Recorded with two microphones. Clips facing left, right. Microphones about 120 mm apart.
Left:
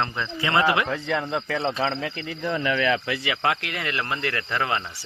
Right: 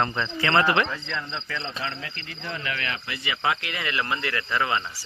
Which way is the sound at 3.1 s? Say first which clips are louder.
Left 3 dB; 85° left.